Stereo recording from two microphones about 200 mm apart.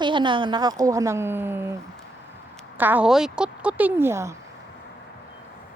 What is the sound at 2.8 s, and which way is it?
Speech, 10° right (ahead or behind).